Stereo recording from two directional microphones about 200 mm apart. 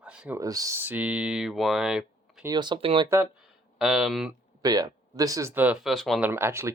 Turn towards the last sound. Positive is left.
turn(degrees=-15)  # may be behind; listen again after turning